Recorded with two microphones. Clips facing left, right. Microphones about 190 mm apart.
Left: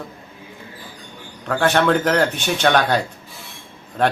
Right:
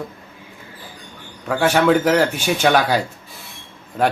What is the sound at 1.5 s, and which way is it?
Speech, 10° right (ahead or behind).